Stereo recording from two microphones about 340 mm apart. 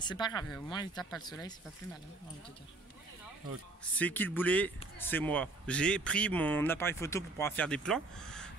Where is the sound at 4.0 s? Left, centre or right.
Centre.